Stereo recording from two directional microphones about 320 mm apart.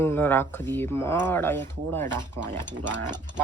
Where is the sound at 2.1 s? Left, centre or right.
Centre.